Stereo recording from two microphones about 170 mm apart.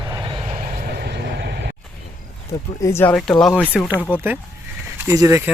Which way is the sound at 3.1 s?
Centre (ahead or behind).